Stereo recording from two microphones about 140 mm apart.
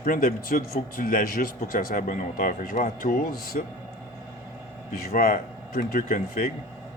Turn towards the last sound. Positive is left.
turn(degrees=75)  # may be behind; listen again after turning